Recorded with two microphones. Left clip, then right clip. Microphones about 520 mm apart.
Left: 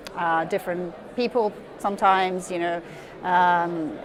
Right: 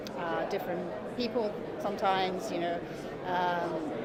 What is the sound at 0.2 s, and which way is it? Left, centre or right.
Speech, left.